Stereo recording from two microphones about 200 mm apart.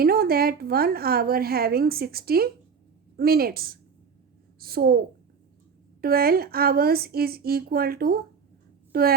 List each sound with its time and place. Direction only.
0.0 s a woman's voice: 50° right (ahead or behind)